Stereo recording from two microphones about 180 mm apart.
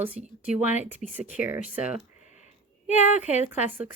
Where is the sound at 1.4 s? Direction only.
10° right (ahead or behind).